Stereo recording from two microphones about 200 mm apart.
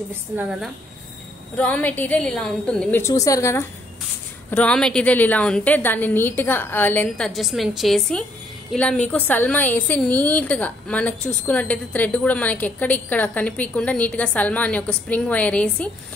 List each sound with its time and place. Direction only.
0.4 s a woman's voice: 5° right (ahead or behind)
1.6 s a woman's voice: 5° left (ahead or behind)